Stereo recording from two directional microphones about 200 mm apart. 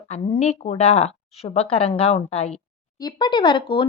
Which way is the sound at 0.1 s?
35° left (ahead or behind).